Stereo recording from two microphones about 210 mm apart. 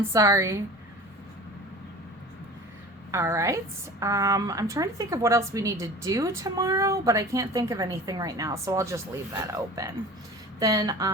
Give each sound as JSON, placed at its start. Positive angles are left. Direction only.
{"t": 0.1, "sound": "a woman's voice", "side_deg": -15}
{"t": 3.1, "sound": "a woman's voice", "side_deg": -15}